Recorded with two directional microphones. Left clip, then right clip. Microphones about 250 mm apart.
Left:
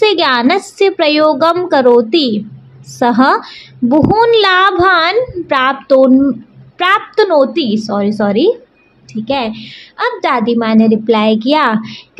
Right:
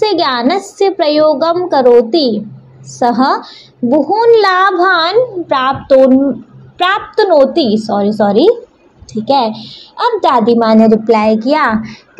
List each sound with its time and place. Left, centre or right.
0.0 s a woman's voice: left
5.9 s a woman's voice: centre
6.8 s a woman's voice: left
7.2 s a woman's voice: centre
8.2 s a woman's voice: left
9.2 s a woman's voice: centre
9.5 s a woman's voice: left
9.9 s a woman's voice: centre
10.6 s a woman's voice: left